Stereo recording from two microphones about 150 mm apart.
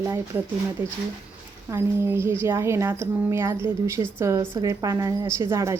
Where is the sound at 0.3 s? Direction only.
15° right (ahead or behind).